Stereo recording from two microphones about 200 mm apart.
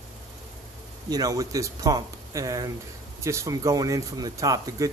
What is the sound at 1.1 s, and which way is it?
Speech, 20° right (ahead or behind).